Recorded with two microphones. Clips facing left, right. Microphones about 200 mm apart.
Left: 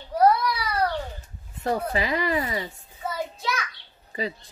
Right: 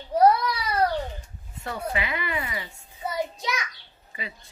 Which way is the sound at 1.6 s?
35° left (ahead or behind).